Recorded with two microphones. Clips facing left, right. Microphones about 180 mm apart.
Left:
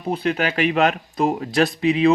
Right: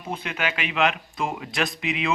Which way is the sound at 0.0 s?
35° left (ahead or behind).